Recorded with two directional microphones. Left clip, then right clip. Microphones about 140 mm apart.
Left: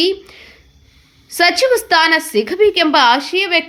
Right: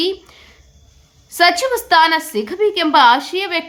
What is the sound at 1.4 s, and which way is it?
A woman's voice, 15° left (ahead or behind).